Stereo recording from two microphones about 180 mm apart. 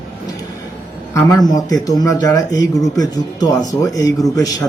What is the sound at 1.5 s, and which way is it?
Speech, 20° left (ahead or behind).